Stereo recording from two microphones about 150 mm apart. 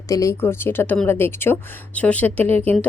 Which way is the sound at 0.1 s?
20° left (ahead or behind).